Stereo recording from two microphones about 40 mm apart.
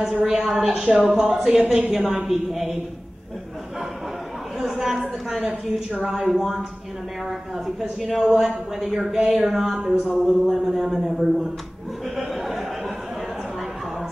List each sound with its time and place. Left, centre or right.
0.0 s a man's voice: centre
1.7 s speech: centre
2.2 s a man's voice: centre
4.6 s a sound: centre
6.0 s speech: centre
8.0 s a man's voice: centre
9.9 s a man's voice: centre
12.2 s a sound: centre